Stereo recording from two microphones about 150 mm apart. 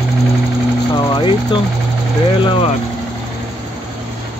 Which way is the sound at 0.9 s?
35° left (ahead or behind).